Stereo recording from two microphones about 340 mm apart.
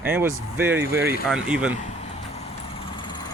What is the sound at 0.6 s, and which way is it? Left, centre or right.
Speech, centre.